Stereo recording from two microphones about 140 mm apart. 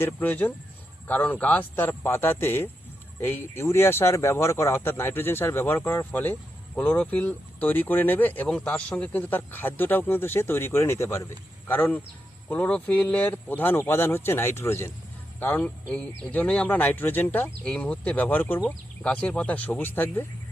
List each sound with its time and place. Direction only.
0.0 s speech: 10° left (ahead or behind)